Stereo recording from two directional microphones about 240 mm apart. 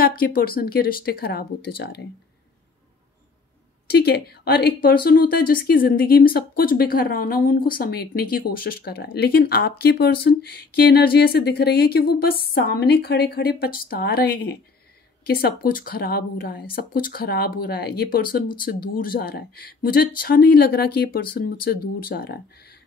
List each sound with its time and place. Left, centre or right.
0.0 s speech: left
3.9 s speech: left